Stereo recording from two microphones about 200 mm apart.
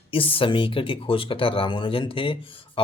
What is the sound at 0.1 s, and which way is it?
Speech, 25° left (ahead or behind).